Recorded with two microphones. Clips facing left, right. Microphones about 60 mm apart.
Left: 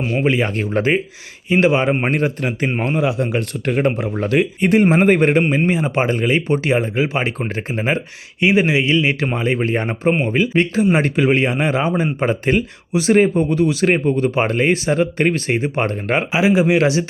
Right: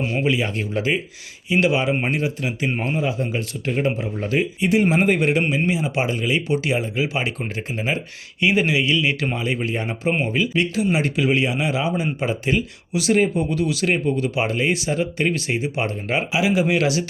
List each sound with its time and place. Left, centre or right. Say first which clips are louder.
0.3 s speech: left 4 dB; left
2.6 s speech: left 3 dB; left
2.9 s speech: left 5 dB; left
4.7 s speech: left 5 dB; left
8.4 s speech: left 4 dB; left
12.9 s speech: left 5 dB; left
16.3 s a man's voice: left 5 dB; left